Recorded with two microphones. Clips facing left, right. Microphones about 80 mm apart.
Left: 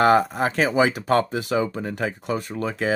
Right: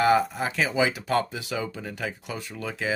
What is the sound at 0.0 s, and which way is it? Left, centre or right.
Speech, left.